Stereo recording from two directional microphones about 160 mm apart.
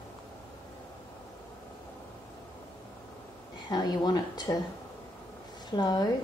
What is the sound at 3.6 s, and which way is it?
Speech, 25° left (ahead or behind).